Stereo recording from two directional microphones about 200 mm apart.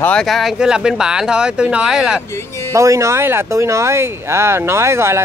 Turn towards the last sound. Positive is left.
turn(degrees=-15)  # may be behind; listen again after turning